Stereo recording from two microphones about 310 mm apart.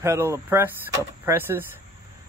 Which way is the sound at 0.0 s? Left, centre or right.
Centre.